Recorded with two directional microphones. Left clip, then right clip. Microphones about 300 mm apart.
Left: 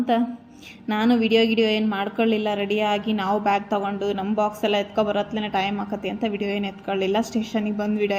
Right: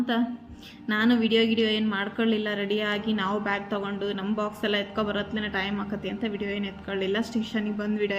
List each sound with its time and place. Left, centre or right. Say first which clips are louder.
0.9 s speech: left 3 dB; centre